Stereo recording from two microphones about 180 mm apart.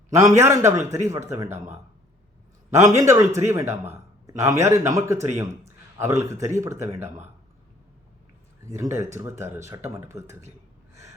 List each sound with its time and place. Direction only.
0.1 s a man's voice: 15° right (ahead or behind)
2.7 s a man's voice: 15° right (ahead or behind)
8.6 s a man's voice: 15° right (ahead or behind)